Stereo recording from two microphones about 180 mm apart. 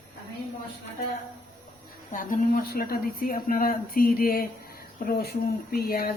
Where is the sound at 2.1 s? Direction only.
50° left (ahead or behind).